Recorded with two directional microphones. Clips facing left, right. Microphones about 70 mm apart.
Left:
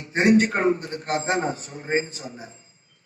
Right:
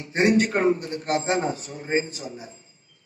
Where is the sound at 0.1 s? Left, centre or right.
Left.